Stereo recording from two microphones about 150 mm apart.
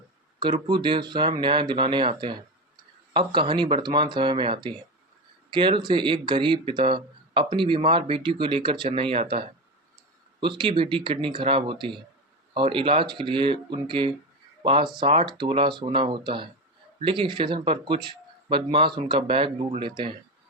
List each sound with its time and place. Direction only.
0.3 s speech: 30° right (ahead or behind)